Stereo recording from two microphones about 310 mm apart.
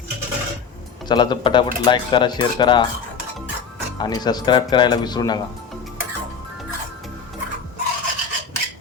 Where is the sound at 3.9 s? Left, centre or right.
Centre.